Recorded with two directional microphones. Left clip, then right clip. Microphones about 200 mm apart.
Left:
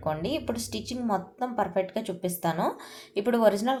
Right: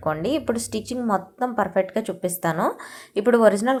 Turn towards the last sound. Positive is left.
turn(degrees=-20)  # may be behind; listen again after turning